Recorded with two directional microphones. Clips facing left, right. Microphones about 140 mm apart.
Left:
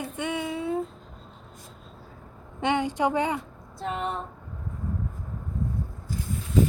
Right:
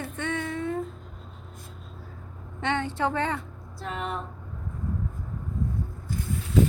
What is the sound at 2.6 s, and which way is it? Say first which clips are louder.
A woman's voice: left 3 dB; 15° left (ahead or behind).